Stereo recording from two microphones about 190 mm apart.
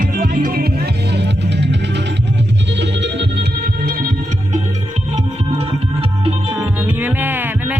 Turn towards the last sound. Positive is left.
turn(degrees=-10)  # may be behind; listen again after turning